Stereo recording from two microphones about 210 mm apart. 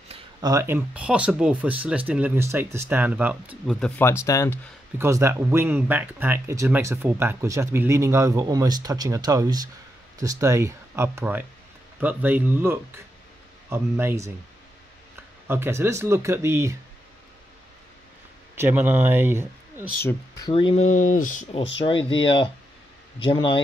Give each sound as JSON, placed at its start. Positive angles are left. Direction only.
{"t": 0.1, "sound": "speech", "side_deg": -20}
{"t": 3.8, "sound": "speech", "side_deg": 10}
{"t": 4.9, "sound": "speech", "side_deg": -10}
{"t": 15.4, "sound": "speech", "side_deg": -10}
{"t": 18.6, "sound": "speech", "side_deg": -10}
{"t": 20.0, "sound": "speech", "side_deg": 15}
{"t": 20.9, "sound": "speech", "side_deg": 40}
{"t": 21.7, "sound": "speech", "side_deg": 25}